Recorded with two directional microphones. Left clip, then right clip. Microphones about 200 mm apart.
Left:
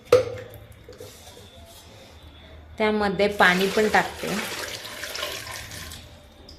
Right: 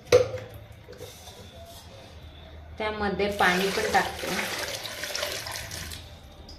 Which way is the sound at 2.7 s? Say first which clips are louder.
Left 6 dB; 45° left (ahead or behind).